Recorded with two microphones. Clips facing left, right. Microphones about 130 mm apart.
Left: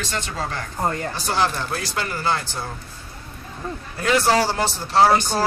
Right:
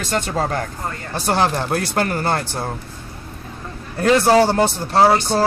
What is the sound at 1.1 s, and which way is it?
Speech, 60° right (ahead or behind).